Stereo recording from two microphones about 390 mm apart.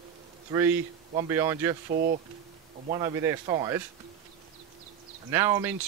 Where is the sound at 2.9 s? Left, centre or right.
Centre.